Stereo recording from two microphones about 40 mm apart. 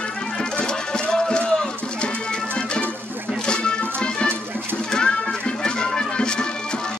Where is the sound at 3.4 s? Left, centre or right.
Left.